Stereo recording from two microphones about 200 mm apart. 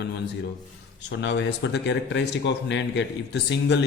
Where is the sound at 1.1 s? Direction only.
65° left (ahead or behind).